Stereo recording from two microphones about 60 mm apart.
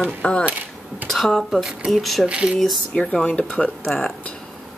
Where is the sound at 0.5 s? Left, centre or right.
Right.